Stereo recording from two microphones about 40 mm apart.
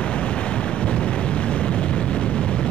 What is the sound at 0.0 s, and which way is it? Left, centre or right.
Vehicle, left.